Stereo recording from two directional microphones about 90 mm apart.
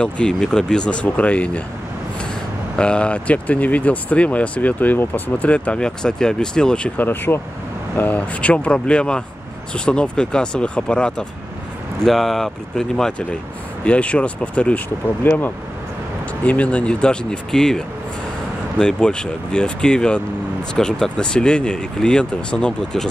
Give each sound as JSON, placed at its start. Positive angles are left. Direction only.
{"t": 0.0, "sound": "speech", "side_deg": 10}
{"t": 2.8, "sound": "speech", "side_deg": 10}